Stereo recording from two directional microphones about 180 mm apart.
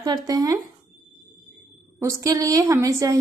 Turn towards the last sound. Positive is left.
turn(degrees=-20)  # may be behind; listen again after turning